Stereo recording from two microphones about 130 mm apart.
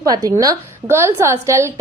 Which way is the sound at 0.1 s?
25° right (ahead or behind).